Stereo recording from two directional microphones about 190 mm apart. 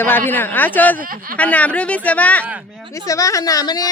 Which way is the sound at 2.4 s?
5° right (ahead or behind).